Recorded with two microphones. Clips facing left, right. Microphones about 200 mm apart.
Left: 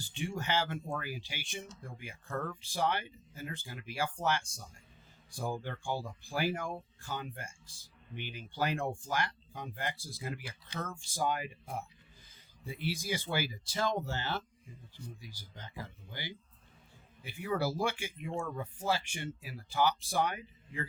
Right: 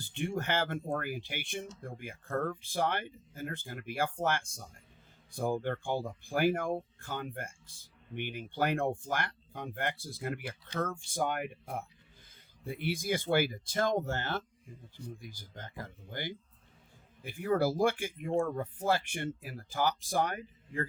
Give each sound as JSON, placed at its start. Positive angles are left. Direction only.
{"t": 0.0, "sound": "speech", "side_deg": -55}